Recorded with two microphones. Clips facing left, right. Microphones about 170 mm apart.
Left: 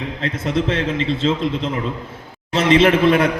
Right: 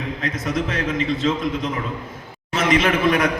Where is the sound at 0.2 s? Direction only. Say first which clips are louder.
Left 4 dB; 30° left (ahead or behind).